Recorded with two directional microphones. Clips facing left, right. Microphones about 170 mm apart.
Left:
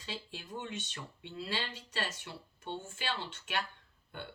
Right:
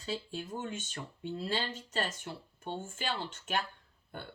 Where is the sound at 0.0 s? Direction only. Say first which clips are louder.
Right 6 dB; 40° right (ahead or behind).